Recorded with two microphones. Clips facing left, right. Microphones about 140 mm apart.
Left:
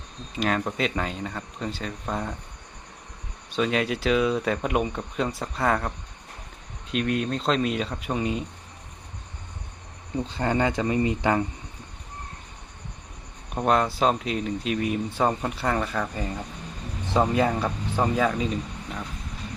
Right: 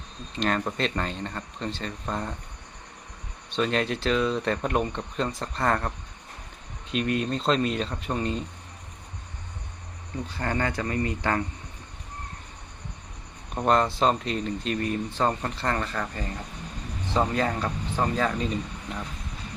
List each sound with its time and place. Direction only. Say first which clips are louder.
0.3 s speech: left 1 dB; 5° left (ahead or behind)
3.5 s speech: left 1 dB; 5° left (ahead or behind)
6.9 s speech: left 1 dB; centre (ahead or behind)
10.2 s speech: left 4 dB; 20° left (ahead or behind)
13.5 s speech: even; 5° left (ahead or behind)